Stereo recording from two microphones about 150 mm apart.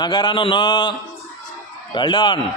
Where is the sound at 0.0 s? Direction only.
30° left (ahead or behind).